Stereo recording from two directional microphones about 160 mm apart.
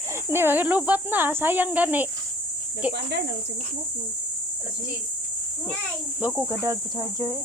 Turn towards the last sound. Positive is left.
turn(degrees=-20)  # may be behind; listen again after turning